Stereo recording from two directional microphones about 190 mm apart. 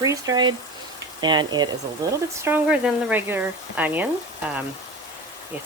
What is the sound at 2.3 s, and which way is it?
Speech, 10° right (ahead or behind).